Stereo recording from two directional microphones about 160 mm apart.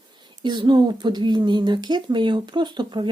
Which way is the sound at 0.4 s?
30° right (ahead or behind).